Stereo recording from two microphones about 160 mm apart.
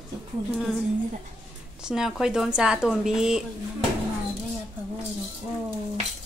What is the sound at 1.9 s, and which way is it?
Speech, 5° right (ahead or behind).